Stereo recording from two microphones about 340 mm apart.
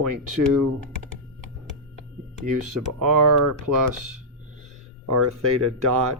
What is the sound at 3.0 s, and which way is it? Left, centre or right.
Speech, right.